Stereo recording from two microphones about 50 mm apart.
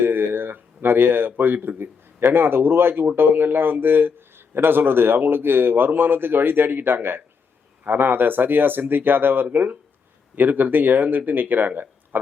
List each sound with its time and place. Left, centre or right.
0.0 s speech: right